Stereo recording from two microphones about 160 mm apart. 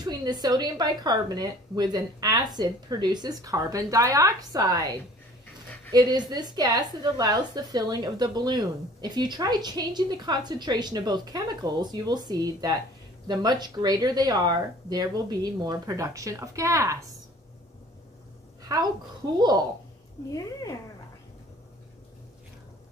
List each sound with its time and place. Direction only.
0.0 s a woman's voice: 25° right (ahead or behind)
5.9 s a woman's voice: 25° right (ahead or behind)
18.6 s a sound: 25° right (ahead or behind)
19.3 s a woman's voice: 25° right (ahead or behind)